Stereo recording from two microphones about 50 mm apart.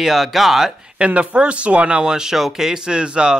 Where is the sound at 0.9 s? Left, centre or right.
Right.